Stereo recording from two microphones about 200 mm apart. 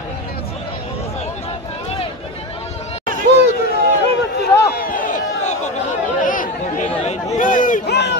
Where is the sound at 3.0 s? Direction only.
45° right (ahead or behind).